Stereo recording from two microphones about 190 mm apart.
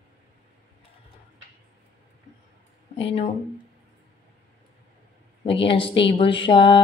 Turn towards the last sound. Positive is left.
turn(degrees=25)  # may be behind; listen again after turning